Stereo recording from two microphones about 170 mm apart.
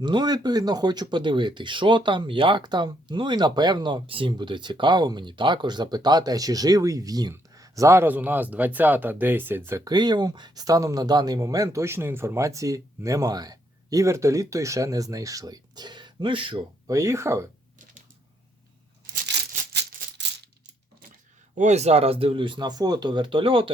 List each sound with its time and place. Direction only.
0.0 s speech: 25° right (ahead or behind)
21.6 s speech: 40° right (ahead or behind)